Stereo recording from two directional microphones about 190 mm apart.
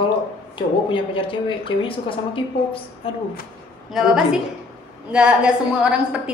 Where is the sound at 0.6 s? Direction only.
25° left (ahead or behind).